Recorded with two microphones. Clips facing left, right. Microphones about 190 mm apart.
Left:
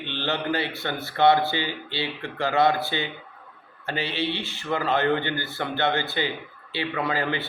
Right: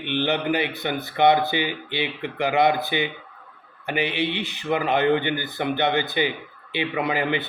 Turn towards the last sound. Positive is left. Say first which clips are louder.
# right 3 dB
turn(degrees=-15)  # may be behind; listen again after turning